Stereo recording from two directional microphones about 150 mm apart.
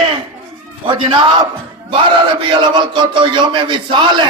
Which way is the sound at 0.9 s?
30° right (ahead or behind).